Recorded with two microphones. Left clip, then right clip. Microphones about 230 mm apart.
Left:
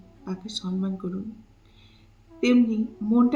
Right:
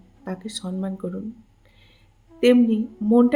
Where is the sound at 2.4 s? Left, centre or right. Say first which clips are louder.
Right 5 dB; right.